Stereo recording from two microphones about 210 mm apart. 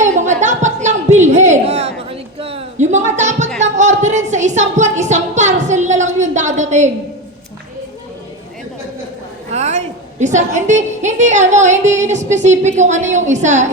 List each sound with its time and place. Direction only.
0.0 s a sound: 35° right (ahead or behind)
3.6 s music: 35° right (ahead or behind)
9.5 s a woman's voice: 30° right (ahead or behind)